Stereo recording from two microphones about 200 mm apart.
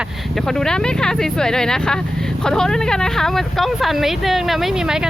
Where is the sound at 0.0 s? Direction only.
Centre (ahead or behind).